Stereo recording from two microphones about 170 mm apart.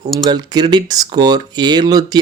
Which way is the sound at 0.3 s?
25° right (ahead or behind).